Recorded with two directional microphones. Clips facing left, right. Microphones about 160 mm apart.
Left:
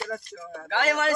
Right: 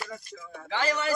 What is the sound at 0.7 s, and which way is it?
Speech, 75° left (ahead or behind).